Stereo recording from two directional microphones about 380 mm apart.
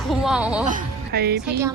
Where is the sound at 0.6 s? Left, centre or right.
Right.